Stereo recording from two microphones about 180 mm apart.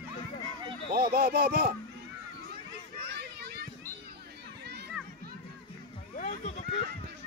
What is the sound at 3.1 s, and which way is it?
Children playing, 65° right (ahead or behind).